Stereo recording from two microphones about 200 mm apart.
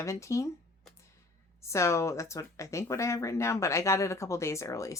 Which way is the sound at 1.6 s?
15° left (ahead or behind).